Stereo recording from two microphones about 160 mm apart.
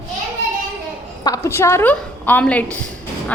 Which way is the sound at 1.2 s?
20° left (ahead or behind).